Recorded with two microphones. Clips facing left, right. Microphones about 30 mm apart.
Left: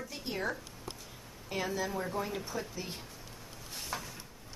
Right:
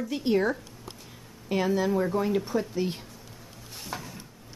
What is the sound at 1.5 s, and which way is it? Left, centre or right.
Speech, centre.